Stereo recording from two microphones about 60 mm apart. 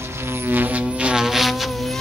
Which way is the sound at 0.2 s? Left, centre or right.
Right.